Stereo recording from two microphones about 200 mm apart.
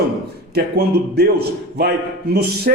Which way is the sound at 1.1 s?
50° right (ahead or behind).